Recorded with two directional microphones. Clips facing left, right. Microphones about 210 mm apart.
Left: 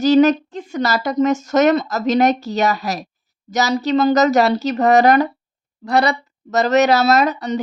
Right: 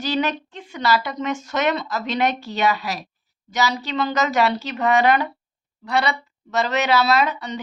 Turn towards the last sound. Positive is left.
turn(degrees=40)  # may be behind; listen again after turning